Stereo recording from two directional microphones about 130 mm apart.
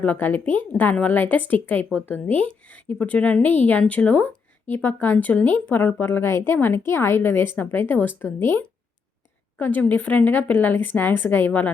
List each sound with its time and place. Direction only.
0.0 s a woman's voice: 15° left (ahead or behind)